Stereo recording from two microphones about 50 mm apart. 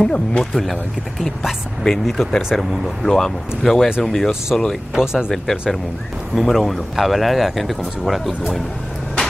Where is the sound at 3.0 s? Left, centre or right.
Centre.